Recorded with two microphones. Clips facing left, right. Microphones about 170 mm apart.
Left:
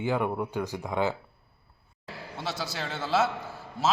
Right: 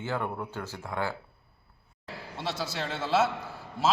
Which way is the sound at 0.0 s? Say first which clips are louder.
Left 5 dB; 15° left (ahead or behind).